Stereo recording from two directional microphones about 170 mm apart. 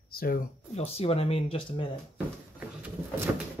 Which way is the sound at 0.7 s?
35° left (ahead or behind).